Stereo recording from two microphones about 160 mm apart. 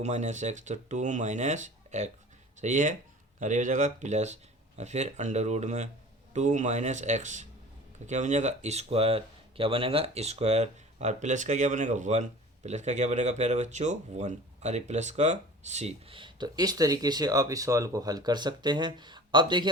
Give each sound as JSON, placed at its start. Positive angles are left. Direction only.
{"t": 0.0, "sound": "speech", "side_deg": -45}